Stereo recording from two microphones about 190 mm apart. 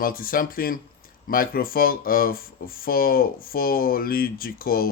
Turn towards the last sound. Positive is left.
turn(degrees=50)  # may be behind; listen again after turning